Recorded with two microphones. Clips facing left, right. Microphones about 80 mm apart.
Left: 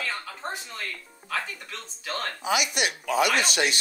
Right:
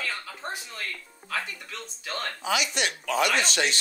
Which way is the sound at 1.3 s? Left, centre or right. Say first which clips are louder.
Left 1 dB; centre.